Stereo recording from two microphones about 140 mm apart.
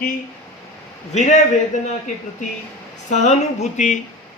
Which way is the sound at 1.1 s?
60° left (ahead or behind).